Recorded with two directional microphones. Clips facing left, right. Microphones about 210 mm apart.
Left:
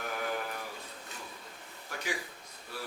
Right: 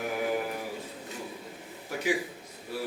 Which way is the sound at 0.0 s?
10° right (ahead or behind).